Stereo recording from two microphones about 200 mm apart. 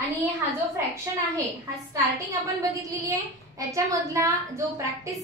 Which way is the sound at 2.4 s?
15° right (ahead or behind).